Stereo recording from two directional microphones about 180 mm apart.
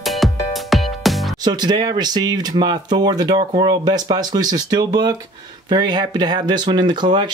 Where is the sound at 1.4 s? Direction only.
25° right (ahead or behind).